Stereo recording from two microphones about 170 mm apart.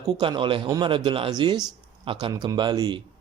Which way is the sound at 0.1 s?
30° right (ahead or behind).